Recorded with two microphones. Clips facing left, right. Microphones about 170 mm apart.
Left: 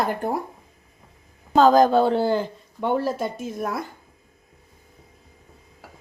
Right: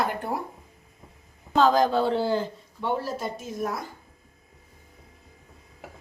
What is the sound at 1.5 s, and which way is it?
A woman's voice, 45° left (ahead or behind).